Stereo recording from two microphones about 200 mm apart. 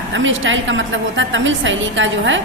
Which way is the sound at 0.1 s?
70° right (ahead or behind).